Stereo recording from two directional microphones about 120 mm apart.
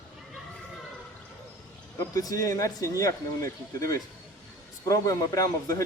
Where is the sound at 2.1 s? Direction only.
30° left (ahead or behind).